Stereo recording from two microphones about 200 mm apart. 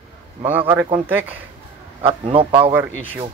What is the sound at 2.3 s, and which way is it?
Speech, 25° right (ahead or behind).